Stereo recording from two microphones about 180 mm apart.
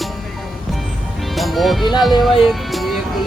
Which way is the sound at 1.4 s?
Centre (ahead or behind).